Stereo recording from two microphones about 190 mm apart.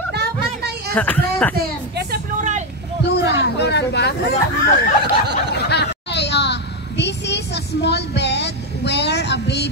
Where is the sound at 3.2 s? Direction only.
65° left (ahead or behind).